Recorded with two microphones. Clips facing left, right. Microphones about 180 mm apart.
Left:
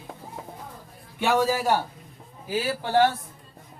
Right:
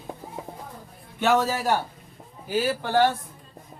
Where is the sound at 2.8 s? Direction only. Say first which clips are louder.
Left 3 dB; 5° left (ahead or behind).